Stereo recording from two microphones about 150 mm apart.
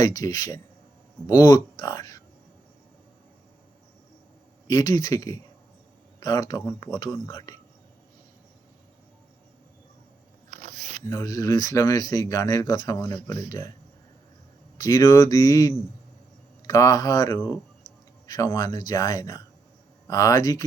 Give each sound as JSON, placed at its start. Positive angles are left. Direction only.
{"t": 0.0, "sound": "speech", "side_deg": 25}
{"t": 4.7, "sound": "speech", "side_deg": 25}
{"t": 10.5, "sound": "biting", "side_deg": -55}
{"t": 11.1, "sound": "speech", "side_deg": 25}
{"t": 14.8, "sound": "speech", "side_deg": 25}